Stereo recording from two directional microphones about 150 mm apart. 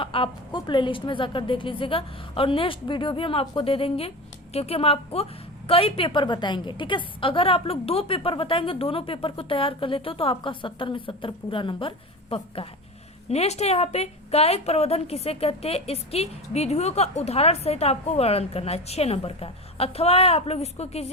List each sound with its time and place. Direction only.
0.0 s a woman's voice: 35° left (ahead or behind)